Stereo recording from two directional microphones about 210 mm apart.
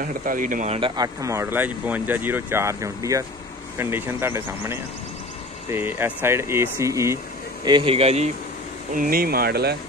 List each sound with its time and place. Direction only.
0.0 s speech: 40° right (ahead or behind)
0.7 s speech: 20° right (ahead or behind)
8.9 s speech: 40° right (ahead or behind)